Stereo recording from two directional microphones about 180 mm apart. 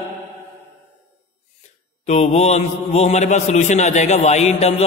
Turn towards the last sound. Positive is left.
turn(degrees=35)  # may be behind; listen again after turning